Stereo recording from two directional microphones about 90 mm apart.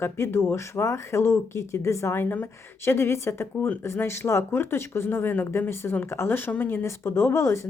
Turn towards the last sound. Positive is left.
turn(degrees=35)  # may be behind; listen again after turning